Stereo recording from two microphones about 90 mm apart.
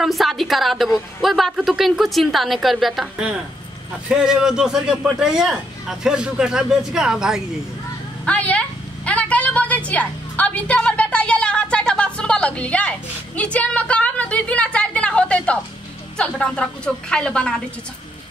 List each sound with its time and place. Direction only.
0.0 s a woman's voice: centre (ahead or behind)
8.3 s a sound: 15° left (ahead or behind)
13.4 s a woman's voice: 15° left (ahead or behind)